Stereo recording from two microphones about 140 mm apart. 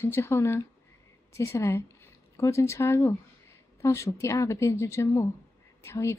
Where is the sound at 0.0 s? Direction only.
20° left (ahead or behind).